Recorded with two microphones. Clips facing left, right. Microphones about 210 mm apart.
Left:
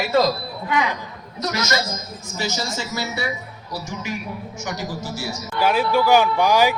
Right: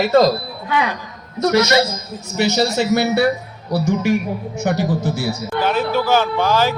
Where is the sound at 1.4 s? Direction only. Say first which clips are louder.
Right 9 dB; 60° right (ahead or behind).